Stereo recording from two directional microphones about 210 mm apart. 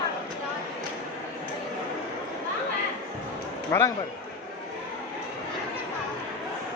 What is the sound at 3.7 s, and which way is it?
Speech, 15° left (ahead or behind).